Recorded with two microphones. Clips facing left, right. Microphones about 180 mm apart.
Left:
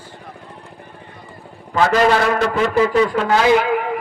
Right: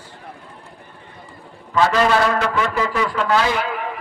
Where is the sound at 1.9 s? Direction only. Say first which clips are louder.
Left 5 dB; 45° left (ahead or behind).